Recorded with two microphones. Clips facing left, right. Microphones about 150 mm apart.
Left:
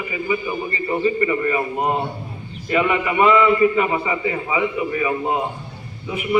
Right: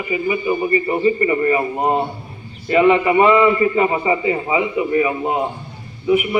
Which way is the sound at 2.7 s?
25° right (ahead or behind).